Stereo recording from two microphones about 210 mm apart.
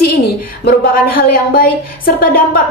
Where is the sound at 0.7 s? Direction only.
45° left (ahead or behind).